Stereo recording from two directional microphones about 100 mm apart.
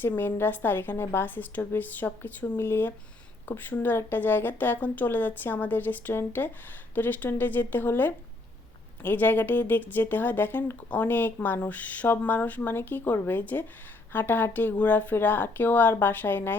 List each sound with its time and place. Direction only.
0.0 s speech: 20° left (ahead or behind)